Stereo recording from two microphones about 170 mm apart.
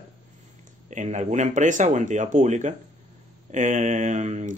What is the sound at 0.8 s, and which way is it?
Speech, 45° right (ahead or behind).